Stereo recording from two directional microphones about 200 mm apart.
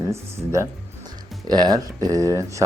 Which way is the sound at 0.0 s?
15° right (ahead or behind).